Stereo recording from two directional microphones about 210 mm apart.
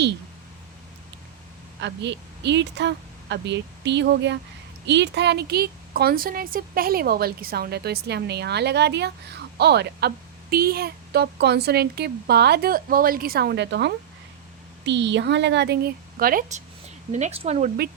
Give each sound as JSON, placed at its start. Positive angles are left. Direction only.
{"t": 1.8, "sound": "a woman's voice", "side_deg": -55}